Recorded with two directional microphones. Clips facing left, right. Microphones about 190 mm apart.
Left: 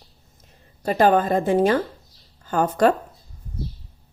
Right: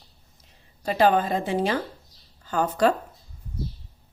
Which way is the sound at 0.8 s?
45° left (ahead or behind).